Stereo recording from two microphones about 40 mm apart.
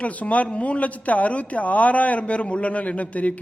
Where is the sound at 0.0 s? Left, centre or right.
Left.